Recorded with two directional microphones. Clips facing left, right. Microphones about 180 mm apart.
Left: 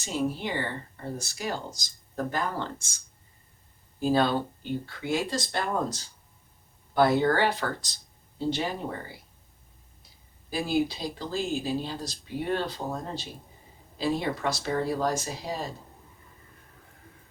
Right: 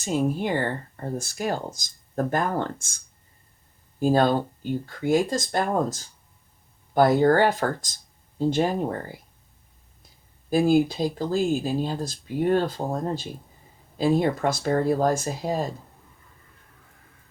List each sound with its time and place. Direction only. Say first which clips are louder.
0.0 s speech: right 5 dB; 50° right (ahead or behind)
4.0 s speech: right 4 dB; 45° right (ahead or behind)
10.5 s speech: right 8 dB; 50° right (ahead or behind)